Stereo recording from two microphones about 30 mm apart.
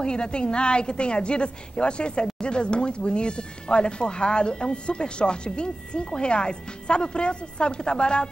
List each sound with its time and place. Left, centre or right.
0.0 s speech: left